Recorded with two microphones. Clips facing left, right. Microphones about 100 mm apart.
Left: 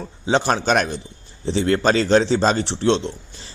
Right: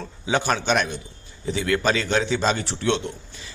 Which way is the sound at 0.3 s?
30° left (ahead or behind).